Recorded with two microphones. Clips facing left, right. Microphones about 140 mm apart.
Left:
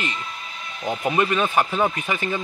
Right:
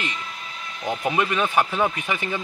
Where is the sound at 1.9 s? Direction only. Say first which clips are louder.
Left 2 dB; 10° right (ahead or behind).